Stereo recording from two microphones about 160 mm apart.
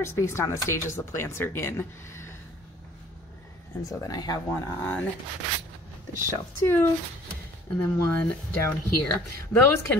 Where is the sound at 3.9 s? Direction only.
25° left (ahead or behind).